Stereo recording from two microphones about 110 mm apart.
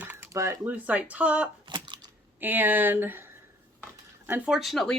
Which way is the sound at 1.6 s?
45° right (ahead or behind).